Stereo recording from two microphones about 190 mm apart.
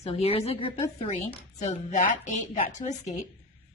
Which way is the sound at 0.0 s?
30° left (ahead or behind).